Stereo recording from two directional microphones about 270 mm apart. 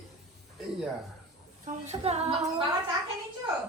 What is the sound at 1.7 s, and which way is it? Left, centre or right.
Speech, right.